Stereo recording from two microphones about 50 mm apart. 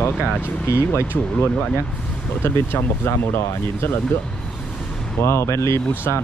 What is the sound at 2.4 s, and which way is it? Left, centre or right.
Speech, left.